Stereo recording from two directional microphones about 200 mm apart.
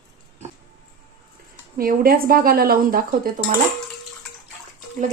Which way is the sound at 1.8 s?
45° right (ahead or behind).